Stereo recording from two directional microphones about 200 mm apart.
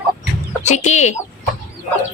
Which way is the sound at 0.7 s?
35° left (ahead or behind).